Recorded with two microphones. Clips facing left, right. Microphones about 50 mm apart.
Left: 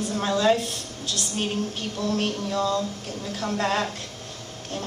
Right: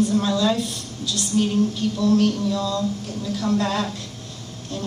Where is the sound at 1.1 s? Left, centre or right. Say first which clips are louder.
Right 8 dB; left.